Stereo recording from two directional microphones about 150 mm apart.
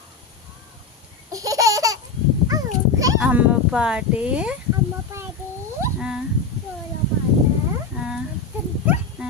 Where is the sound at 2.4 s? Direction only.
25° right (ahead or behind).